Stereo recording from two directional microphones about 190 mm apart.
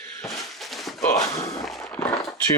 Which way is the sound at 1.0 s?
15° left (ahead or behind).